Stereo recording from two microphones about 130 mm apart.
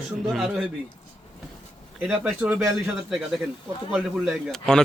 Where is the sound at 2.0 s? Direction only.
5° right (ahead or behind).